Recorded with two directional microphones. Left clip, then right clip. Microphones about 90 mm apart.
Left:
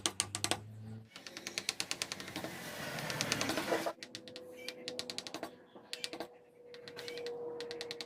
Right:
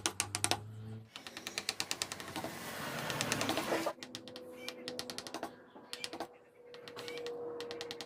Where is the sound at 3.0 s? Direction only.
10° right (ahead or behind).